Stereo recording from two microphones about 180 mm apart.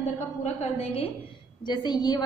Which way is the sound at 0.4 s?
35° left (ahead or behind).